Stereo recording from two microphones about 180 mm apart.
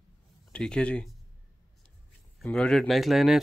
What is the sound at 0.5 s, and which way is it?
Speech, 5° left (ahead or behind).